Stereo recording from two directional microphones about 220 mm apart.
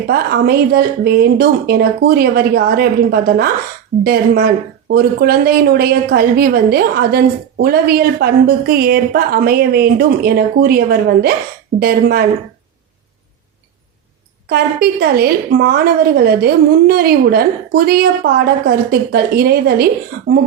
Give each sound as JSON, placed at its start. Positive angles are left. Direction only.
{"t": 0.1, "sound": "a woman's voice", "side_deg": -45}
{"t": 14.5, "sound": "a woman's voice", "side_deg": -45}